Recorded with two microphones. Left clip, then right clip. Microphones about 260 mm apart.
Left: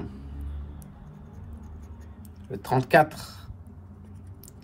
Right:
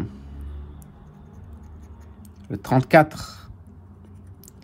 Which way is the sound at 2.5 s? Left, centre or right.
Right.